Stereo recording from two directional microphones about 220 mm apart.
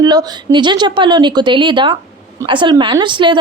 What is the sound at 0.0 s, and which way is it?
A woman's voice, 20° right (ahead or behind).